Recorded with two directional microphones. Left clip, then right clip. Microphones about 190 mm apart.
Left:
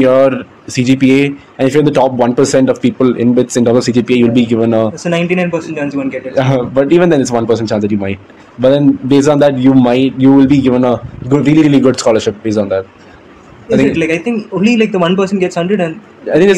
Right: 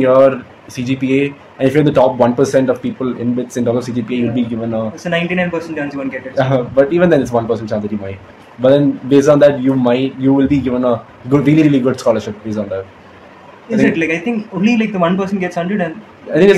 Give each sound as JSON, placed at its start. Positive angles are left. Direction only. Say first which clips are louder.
{"t": 0.0, "sound": "speech", "louder": "left 1 dB", "side_deg": 45}
{"t": 4.9, "sound": "speech", "louder": "left 3 dB", "side_deg": 30}
{"t": 6.3, "sound": "speech", "louder": "left 1 dB", "side_deg": 50}
{"t": 13.9, "sound": "speech", "louder": "left 3 dB", "side_deg": 30}